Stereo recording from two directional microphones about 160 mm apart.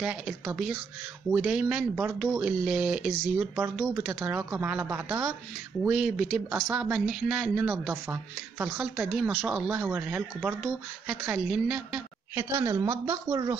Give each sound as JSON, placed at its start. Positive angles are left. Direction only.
{"t": 0.0, "sound": "speech", "side_deg": -5}
{"t": 8.9, "sound": "speech", "side_deg": 0}
{"t": 12.4, "sound": "speech", "side_deg": -20}